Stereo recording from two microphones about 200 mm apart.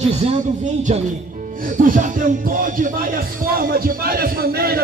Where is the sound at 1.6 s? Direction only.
40° right (ahead or behind).